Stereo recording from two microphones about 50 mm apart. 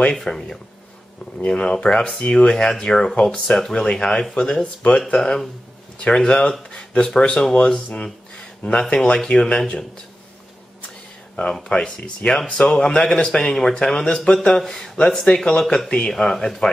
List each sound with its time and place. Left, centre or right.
0.1 s speech: centre
6.7 s a sound: centre
7.1 s speech: centre
11.7 s speech: left